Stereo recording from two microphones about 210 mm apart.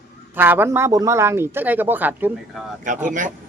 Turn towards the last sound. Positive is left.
turn(degrees=-40)  # may be behind; listen again after turning